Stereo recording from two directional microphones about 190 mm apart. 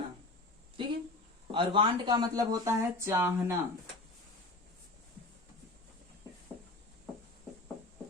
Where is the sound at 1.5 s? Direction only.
25° right (ahead or behind).